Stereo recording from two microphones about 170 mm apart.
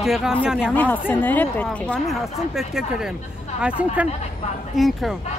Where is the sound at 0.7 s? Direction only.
10° left (ahead or behind).